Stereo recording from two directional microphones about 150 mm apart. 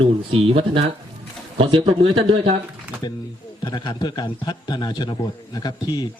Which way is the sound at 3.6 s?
25° left (ahead or behind).